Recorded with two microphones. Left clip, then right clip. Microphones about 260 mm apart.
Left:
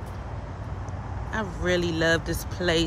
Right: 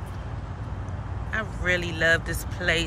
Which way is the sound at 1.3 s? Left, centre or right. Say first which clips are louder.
Right 1 dB; centre.